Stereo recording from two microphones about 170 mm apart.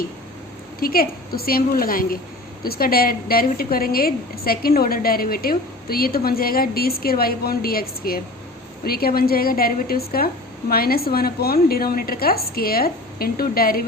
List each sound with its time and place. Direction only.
0.8 s a woman's voice: 60° left (ahead or behind)